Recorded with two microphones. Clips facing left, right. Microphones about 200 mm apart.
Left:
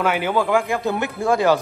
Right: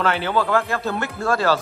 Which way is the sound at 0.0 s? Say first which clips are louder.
Left 1 dB; 10° left (ahead or behind).